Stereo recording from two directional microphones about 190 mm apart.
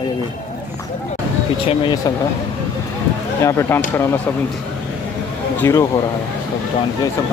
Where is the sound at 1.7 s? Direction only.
25° left (ahead or behind).